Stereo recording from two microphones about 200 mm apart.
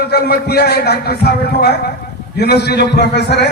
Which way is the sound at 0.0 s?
55° left (ahead or behind).